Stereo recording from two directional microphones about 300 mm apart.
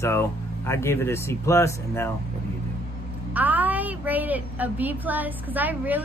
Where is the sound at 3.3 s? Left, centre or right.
Centre.